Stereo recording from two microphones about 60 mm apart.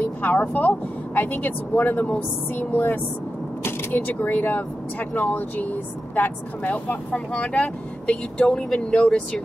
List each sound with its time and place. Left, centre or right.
0.0 s speech: left